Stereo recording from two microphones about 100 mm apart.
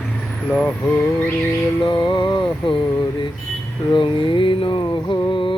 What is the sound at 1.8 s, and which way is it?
Music, 50° left (ahead or behind).